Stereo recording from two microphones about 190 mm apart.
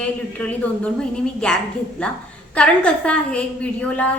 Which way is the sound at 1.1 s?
5° left (ahead or behind).